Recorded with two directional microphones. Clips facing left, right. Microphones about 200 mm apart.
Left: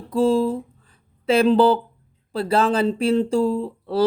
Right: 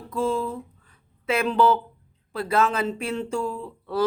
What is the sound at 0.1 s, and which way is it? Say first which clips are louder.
Speech: left 7 dB; 30° left (ahead or behind).